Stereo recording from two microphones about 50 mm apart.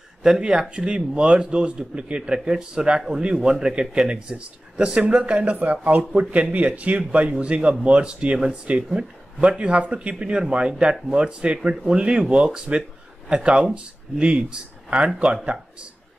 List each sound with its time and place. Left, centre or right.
0.2 s a man's voice: centre